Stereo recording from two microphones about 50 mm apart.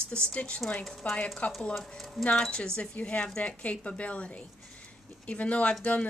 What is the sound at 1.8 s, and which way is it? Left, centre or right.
Speech, centre.